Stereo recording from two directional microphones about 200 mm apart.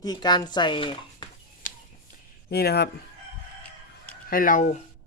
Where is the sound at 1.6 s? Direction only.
40° left (ahead or behind).